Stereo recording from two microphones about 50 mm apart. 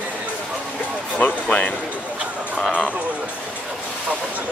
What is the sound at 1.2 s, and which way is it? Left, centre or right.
Speech, left.